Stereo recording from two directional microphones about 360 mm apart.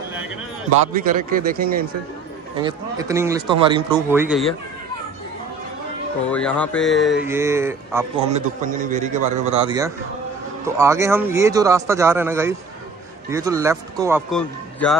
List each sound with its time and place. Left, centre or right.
1.3 s a man's voice: right
2.6 s speech: centre
6.2 s speech: centre
8.3 s a man's voice: right; by 15.0 s centre